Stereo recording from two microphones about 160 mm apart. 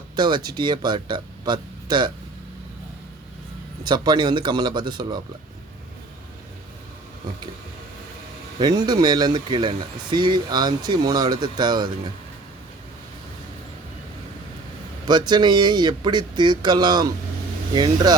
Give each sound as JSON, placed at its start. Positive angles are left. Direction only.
{"t": 0.2, "sound": "speech", "side_deg": -25}
{"t": 3.8, "sound": "speech", "side_deg": -25}
{"t": 8.5, "sound": "speech", "side_deg": -25}
{"t": 15.0, "sound": "speech", "side_deg": -25}